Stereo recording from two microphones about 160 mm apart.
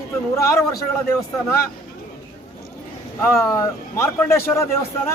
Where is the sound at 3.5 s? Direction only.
20° left (ahead or behind).